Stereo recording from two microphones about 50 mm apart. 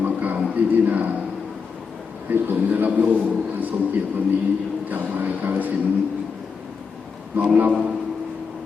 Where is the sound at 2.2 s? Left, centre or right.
Right.